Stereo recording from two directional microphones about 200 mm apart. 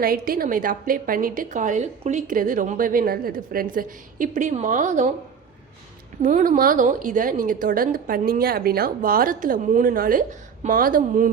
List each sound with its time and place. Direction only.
0.0 s a woman's voice: 45° right (ahead or behind)
6.2 s a woman's voice: 40° right (ahead or behind)